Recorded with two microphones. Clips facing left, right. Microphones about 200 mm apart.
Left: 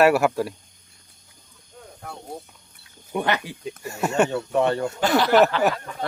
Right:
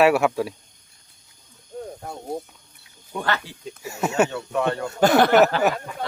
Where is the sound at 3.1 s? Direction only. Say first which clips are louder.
Left 2 dB; 15° left (ahead or behind).